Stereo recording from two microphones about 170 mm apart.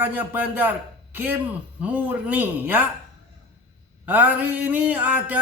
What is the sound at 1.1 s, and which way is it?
Speech, 10° right (ahead or behind).